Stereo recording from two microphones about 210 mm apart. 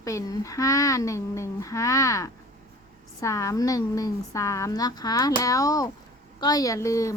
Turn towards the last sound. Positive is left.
turn(degrees=15)  # may be behind; listen again after turning